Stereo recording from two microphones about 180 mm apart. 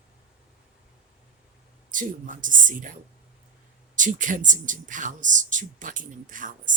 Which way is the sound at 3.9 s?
45° right (ahead or behind).